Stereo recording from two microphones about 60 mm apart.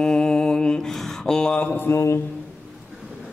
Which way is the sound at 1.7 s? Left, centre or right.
Left.